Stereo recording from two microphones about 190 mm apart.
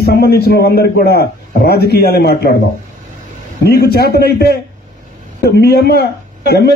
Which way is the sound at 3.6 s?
55° left (ahead or behind).